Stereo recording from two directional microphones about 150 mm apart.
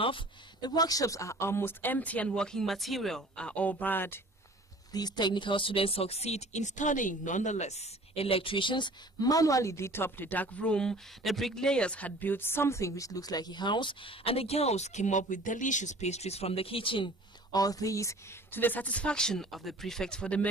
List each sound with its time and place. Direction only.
0.0 s speech: 30° left (ahead or behind); by 4.2 s 15° left (ahead or behind)
4.9 s speech: 30° left (ahead or behind); by 20.4 s 5° left (ahead or behind)